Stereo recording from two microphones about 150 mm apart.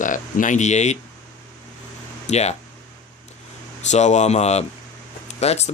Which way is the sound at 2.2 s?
45° left (ahead or behind).